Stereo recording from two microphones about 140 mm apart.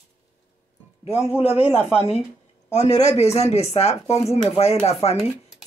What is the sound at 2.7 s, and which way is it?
Speech, 50° left (ahead or behind).